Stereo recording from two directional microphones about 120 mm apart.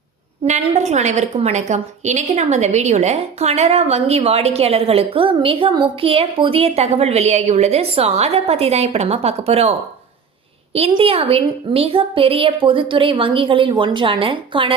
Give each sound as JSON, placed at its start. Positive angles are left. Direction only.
{"t": 0.4, "sound": "a woman's voice", "side_deg": -75}
{"t": 10.9, "sound": "a woman's voice", "side_deg": -50}